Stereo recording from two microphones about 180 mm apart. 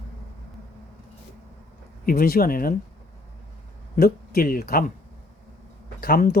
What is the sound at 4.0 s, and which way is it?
Speech, 55° left (ahead or behind).